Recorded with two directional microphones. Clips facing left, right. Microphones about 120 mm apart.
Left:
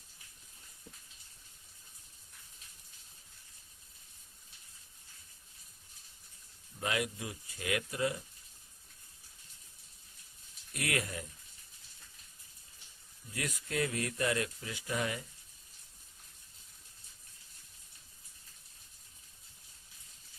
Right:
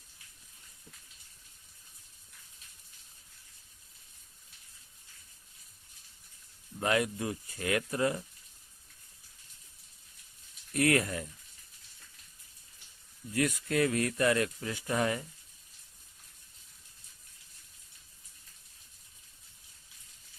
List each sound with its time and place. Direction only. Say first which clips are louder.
6.7 s speech: right 6 dB; 50° right (ahead or behind)
10.8 s speech: right 9 dB; 45° right (ahead or behind)
13.3 s speech: right 7 dB; 60° right (ahead or behind)